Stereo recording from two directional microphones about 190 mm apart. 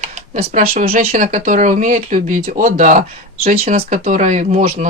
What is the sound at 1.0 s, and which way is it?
Speech, 45° right (ahead or behind).